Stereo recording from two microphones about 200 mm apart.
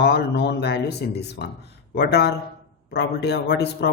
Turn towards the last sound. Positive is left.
turn(degrees=55)  # may be behind; listen again after turning